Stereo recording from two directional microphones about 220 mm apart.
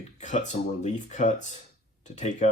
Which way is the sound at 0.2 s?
30° left (ahead or behind).